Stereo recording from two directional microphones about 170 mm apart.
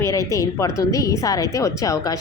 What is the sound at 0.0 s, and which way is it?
A woman's voice, 15° left (ahead or behind).